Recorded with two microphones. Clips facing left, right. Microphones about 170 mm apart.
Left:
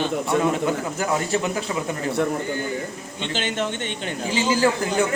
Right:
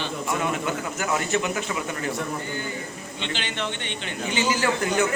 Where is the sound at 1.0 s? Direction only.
35° left (ahead or behind).